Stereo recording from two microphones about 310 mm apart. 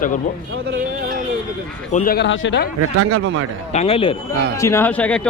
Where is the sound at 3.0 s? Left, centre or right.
Right.